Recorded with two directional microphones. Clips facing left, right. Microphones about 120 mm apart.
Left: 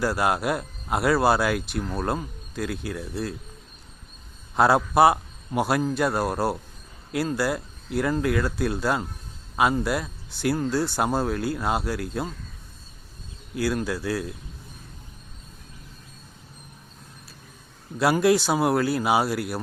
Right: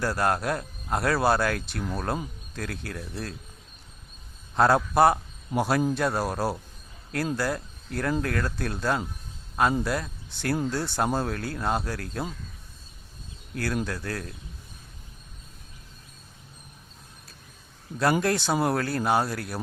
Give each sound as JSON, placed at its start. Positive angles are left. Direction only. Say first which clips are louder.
{"t": 0.0, "sound": "speech", "louder": "left 2 dB", "side_deg": 5}
{"t": 4.5, "sound": "a man's voice", "louder": "left 2 dB", "side_deg": 5}
{"t": 13.5, "sound": "speech", "louder": "left 4 dB", "side_deg": 5}
{"t": 18.0, "sound": "speech", "louder": "left 4 dB", "side_deg": 5}